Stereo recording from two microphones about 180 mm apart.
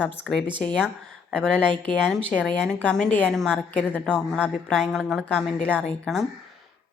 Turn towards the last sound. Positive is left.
turn(degrees=5)  # may be behind; listen again after turning